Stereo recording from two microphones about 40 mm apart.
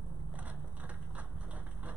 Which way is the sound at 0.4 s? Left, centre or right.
Right.